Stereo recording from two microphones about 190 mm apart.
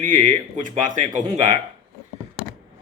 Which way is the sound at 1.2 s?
40° right (ahead or behind).